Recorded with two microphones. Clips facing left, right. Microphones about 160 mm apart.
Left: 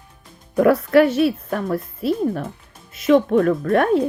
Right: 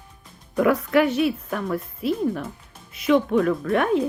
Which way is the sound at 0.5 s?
40° left (ahead or behind).